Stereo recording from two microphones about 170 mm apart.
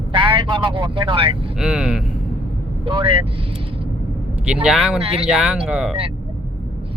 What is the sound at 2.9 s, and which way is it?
Speech, 30° right (ahead or behind).